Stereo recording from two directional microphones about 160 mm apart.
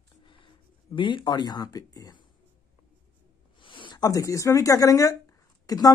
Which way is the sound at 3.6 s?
30° left (ahead or behind).